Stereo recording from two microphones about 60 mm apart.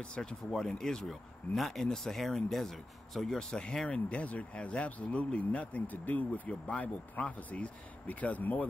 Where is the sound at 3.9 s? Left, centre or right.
Left.